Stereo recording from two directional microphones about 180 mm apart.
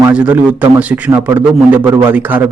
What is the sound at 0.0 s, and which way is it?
A man's voice, 5° right (ahead or behind).